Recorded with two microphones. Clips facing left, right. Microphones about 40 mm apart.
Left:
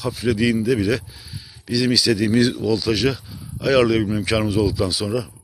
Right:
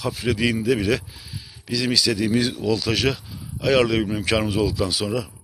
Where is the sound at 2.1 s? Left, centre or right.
Centre.